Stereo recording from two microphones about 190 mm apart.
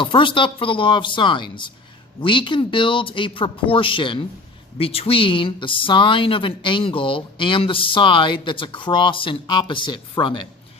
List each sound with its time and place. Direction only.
0.0 s speech: 25° left (ahead or behind)